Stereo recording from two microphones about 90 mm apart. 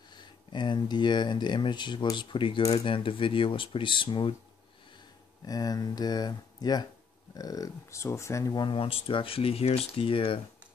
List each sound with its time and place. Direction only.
0.1 s speech: 55° left (ahead or behind)
2.8 s speech: 85° left; by 4.4 s 65° left (ahead or behind)
5.5 s speech: 45° left (ahead or behind)
8.5 s speech: 75° left (ahead or behind)